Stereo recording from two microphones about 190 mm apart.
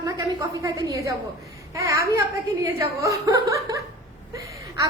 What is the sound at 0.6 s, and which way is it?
A woman's voice, 15° right (ahead or behind).